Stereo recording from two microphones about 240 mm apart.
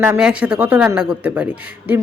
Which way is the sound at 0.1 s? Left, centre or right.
Centre.